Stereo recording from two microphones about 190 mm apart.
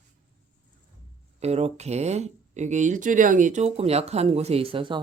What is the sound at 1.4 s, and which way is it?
Speech, 35° right (ahead or behind).